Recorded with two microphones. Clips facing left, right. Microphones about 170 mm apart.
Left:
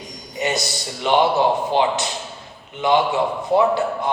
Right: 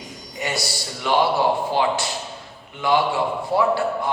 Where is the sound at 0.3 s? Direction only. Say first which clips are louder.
Left 4 dB; 20° left (ahead or behind).